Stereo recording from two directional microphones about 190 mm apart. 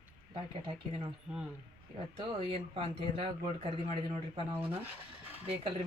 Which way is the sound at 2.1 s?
30° right (ahead or behind).